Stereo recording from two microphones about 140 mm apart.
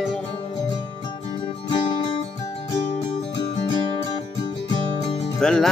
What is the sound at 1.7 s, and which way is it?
Music, 35° left (ahead or behind).